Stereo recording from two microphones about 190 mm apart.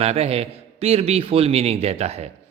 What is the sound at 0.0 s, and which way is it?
Speech, 35° right (ahead or behind).